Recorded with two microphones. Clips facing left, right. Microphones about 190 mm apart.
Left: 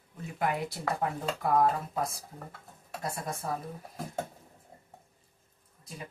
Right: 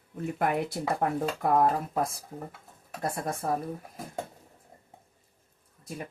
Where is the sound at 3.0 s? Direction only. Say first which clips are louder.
Right 5 dB; 55° right (ahead or behind).